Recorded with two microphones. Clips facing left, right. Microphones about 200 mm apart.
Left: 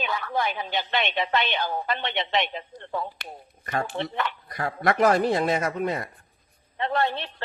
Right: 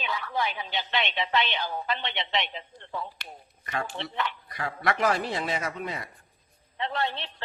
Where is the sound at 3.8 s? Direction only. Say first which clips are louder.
Left 4 dB; 50° left (ahead or behind).